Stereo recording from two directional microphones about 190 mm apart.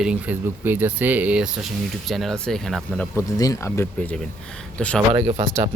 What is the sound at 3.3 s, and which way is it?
Speech, 20° left (ahead or behind).